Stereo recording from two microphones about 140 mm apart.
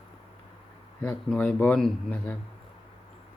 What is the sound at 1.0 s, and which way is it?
Speech, 10° left (ahead or behind).